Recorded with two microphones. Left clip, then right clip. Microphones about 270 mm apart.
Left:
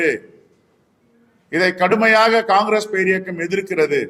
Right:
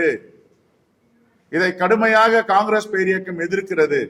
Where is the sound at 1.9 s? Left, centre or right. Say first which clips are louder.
Left 1 dB; left.